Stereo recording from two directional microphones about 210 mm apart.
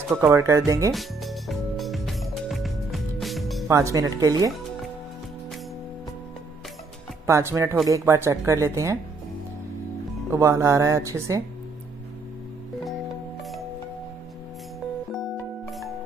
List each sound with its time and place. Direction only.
0.3 s speech: 15° right (ahead or behind)
0.9 s music: centre (ahead or behind)
3.6 s speech: 15° right (ahead or behind)
7.2 s speech: 15° right (ahead or behind)
10.3 s speech: 15° right (ahead or behind)
15.1 s music: centre (ahead or behind)